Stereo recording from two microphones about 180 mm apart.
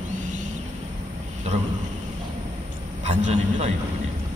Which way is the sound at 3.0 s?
40° right (ahead or behind).